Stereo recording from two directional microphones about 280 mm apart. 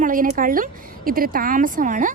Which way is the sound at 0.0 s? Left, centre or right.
Right.